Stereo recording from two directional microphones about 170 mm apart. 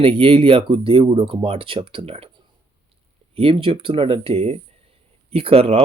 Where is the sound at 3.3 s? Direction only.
30° right (ahead or behind).